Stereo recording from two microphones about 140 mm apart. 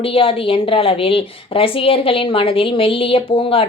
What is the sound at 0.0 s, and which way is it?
A woman's voice, 40° left (ahead or behind).